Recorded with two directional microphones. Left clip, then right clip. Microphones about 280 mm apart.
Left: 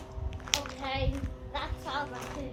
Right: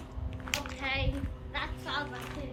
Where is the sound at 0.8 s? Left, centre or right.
Centre.